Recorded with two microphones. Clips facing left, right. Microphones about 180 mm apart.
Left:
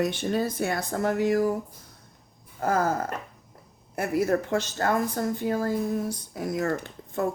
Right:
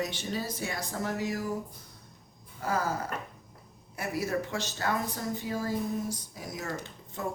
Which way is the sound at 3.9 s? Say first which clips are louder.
Left 7 dB; 55° left (ahead or behind).